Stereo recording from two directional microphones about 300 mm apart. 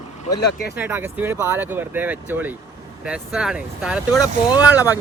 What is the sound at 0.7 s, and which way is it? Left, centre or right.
Speech, centre.